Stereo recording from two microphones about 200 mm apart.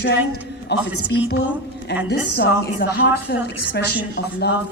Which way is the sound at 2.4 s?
50° left (ahead or behind).